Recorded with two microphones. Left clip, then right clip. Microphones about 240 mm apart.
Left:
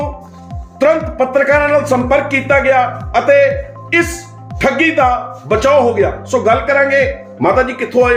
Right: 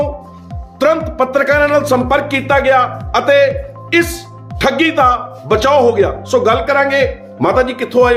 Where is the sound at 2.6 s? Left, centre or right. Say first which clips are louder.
Right 2 dB; right.